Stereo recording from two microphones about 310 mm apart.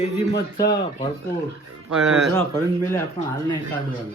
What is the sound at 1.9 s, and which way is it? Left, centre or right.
Speech, centre.